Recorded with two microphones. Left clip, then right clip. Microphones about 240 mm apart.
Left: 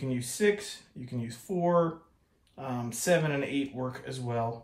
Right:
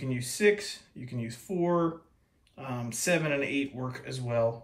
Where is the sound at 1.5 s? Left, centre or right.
Left.